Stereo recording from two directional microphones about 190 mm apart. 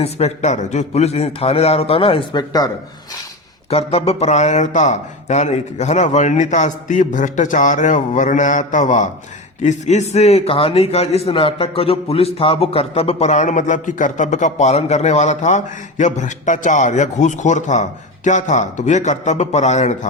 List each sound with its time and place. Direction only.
0.0 s a man's voice: 35° left (ahead or behind)
3.7 s a man's voice: 30° left (ahead or behind)